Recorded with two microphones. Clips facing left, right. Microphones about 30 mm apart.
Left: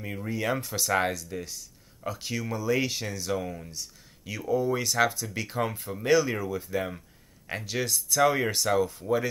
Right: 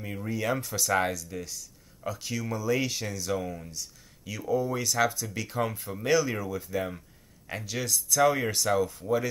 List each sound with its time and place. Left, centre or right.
0.0 s speech: centre